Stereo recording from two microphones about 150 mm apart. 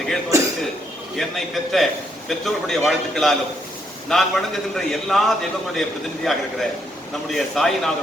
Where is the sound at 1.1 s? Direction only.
Centre (ahead or behind).